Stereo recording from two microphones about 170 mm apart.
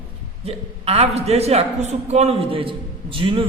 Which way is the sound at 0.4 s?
35° right (ahead or behind).